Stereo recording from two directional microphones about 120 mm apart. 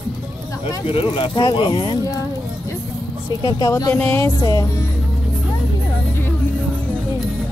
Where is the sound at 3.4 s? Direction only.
35° left (ahead or behind).